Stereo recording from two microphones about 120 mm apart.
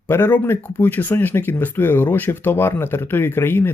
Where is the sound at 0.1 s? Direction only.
20° left (ahead or behind).